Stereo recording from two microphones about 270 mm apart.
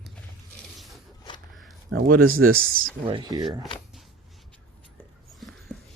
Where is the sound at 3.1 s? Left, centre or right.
Centre.